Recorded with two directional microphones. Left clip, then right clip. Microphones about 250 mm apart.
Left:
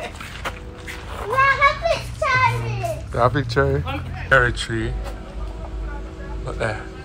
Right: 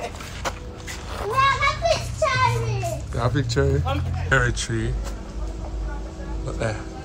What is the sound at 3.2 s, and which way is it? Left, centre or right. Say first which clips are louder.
A man's voice: left 6 dB; centre.